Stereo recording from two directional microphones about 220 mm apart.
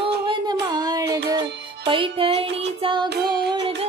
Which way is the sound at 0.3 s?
20° right (ahead or behind).